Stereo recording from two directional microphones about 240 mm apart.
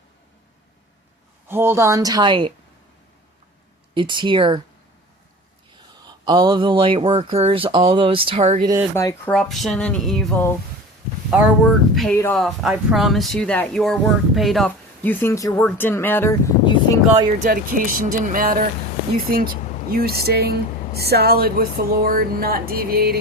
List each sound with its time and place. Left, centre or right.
1.5 s a woman's voice: centre
3.9 s speech: centre
6.1 s speech: centre
9.0 s speech: centre
17.2 s speech: right
19.9 s speech: right